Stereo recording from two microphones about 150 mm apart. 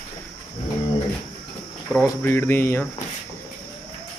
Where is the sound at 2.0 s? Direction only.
15° left (ahead or behind).